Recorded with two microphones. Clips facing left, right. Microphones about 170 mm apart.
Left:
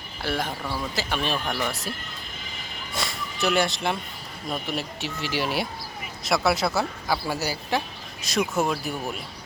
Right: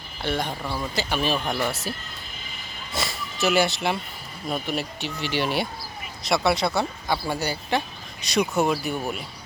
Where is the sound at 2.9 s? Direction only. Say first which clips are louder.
Right 1 dB; 5° right (ahead or behind).